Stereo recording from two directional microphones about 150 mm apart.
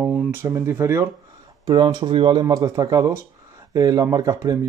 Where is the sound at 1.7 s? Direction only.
30° right (ahead or behind).